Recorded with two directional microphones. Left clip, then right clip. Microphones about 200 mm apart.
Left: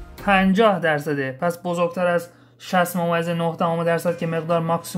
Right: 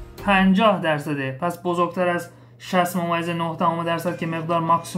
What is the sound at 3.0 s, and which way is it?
Speech, 50° left (ahead or behind).